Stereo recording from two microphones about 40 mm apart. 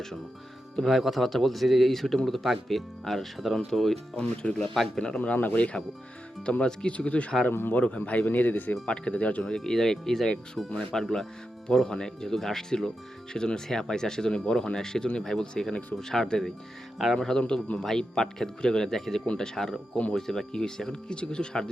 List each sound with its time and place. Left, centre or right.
0.9 s speech: centre
4.1 s speech: left
4.5 s speech: centre
4.9 s speech: left
5.2 s speech: left
8.9 s speech: left
9.4 s speech: centre
17.4 s speech: left
17.7 s speech: centre
19.2 s speech: left
19.5 s speech: centre